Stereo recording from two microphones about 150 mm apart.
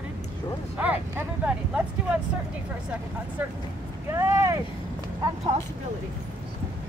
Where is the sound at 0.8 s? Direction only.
10° right (ahead or behind).